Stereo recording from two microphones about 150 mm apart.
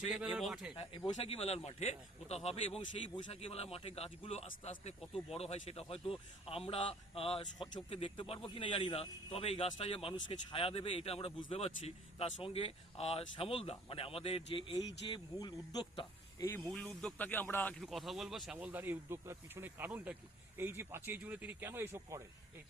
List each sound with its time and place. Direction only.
0.1 s a man's voice: 5° right (ahead or behind)
0.8 s a man's voice: 35° left (ahead or behind)
15.1 s speech: 25° left (ahead or behind)
16.6 s speech: 5° left (ahead or behind)
17.7 s speech: centre (ahead or behind); by 22.2 s 15° right (ahead or behind)